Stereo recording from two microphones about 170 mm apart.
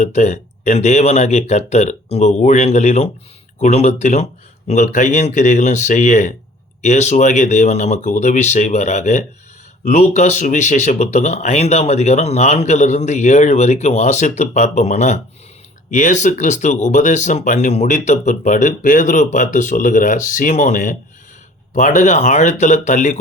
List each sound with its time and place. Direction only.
0.0 s speech: 40° left (ahead or behind)